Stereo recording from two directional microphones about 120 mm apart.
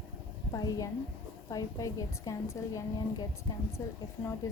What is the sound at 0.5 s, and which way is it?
A woman's voice, 30° left (ahead or behind).